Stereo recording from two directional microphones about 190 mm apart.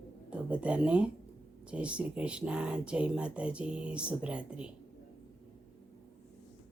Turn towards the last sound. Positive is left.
turn(degrees=-5)  # may be behind; listen again after turning